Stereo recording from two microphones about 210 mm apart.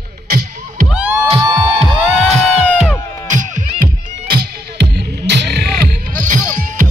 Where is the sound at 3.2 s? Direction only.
35° right (ahead or behind).